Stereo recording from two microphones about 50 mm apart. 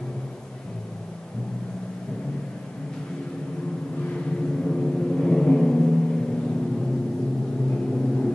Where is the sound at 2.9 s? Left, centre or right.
Centre.